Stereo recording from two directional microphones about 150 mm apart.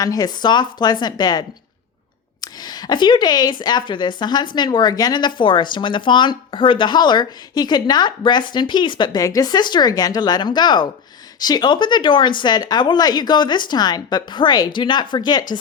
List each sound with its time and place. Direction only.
0.0 s speech: 25° left (ahead or behind)